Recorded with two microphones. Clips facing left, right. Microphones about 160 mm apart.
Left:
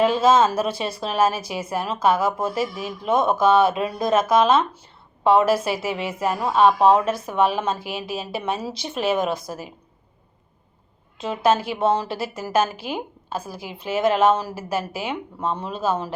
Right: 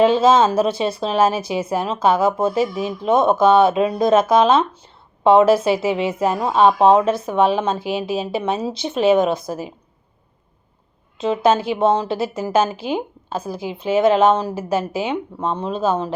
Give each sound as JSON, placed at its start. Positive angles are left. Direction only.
{"t": 0.0, "sound": "a woman's voice", "side_deg": -30}
{"t": 11.2, "sound": "a woman's voice", "side_deg": -25}